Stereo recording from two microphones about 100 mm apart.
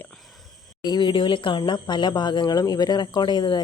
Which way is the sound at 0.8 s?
45° left (ahead or behind).